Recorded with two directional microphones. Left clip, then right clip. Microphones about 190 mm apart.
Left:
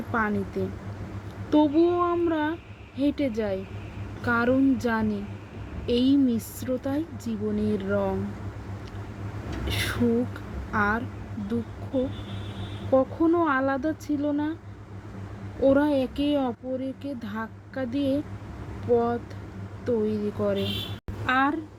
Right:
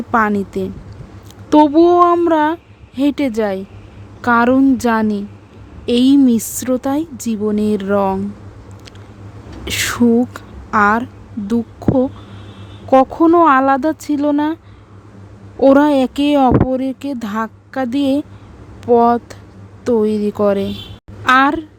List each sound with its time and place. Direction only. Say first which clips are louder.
0.1 s speech: right 12 dB; 60° right (ahead or behind)
9.6 s a sound: right 11 dB; 55° right (ahead or behind)
12.9 s speech: right 12 dB; 60° right (ahead or behind)
15.6 s speech: right 11 dB; 60° right (ahead or behind)
21.2 s a child's voice: right 12 dB; 45° right (ahead or behind)